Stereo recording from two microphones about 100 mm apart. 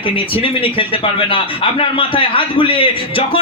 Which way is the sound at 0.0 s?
65° left (ahead or behind).